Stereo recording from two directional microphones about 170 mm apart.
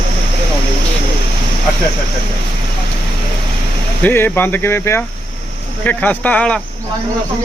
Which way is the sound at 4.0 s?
10° left (ahead or behind).